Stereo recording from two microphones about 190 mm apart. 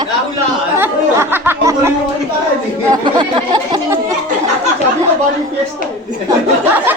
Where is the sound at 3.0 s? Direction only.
25° right (ahead or behind).